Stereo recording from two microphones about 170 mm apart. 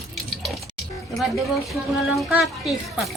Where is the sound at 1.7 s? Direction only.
Centre (ahead or behind).